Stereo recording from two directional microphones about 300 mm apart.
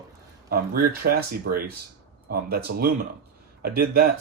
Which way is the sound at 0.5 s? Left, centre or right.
Right.